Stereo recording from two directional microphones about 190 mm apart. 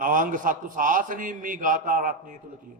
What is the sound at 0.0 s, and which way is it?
A man's voice, 45° right (ahead or behind).